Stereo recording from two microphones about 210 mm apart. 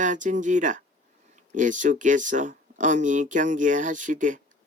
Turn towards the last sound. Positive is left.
turn(degrees=-35)  # may be behind; listen again after turning